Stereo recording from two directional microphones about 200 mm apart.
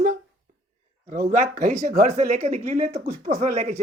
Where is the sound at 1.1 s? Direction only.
40° right (ahead or behind).